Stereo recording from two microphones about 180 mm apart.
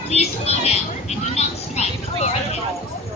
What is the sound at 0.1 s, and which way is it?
Speech, 35° left (ahead or behind).